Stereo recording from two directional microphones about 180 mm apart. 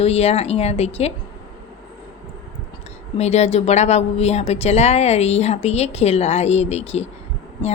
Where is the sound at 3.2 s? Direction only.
35° left (ahead or behind).